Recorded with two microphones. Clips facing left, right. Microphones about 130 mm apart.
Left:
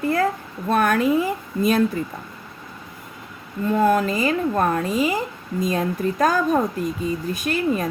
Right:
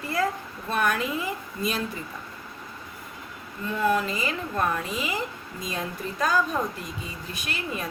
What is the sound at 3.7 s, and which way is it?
A woman's voice, 45° left (ahead or behind).